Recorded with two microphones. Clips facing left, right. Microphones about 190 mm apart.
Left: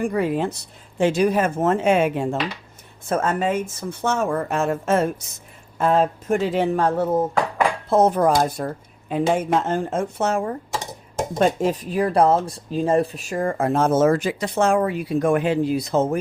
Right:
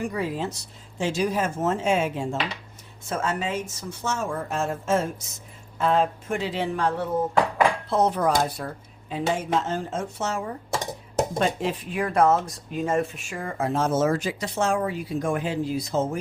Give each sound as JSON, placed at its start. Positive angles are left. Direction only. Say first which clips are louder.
{"t": 0.0, "sound": "speech", "louder": "left 6 dB", "side_deg": 55}
{"t": 5.7, "sound": "speech", "louder": "left 3 dB", "side_deg": 45}